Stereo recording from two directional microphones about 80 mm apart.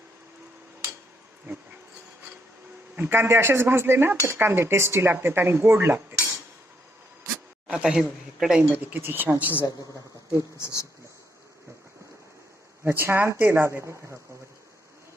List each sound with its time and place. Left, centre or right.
2.9 s speech: right
7.7 s speech: centre
8.7 s speech: right
10.6 s speech: left
12.8 s speech: right